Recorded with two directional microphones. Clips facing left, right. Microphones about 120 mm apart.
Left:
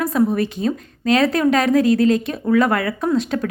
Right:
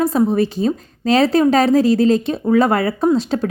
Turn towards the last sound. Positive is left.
turn(degrees=-30)  # may be behind; listen again after turning